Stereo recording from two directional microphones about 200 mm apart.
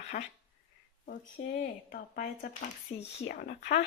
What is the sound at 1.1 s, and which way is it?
Speech, 45° left (ahead or behind).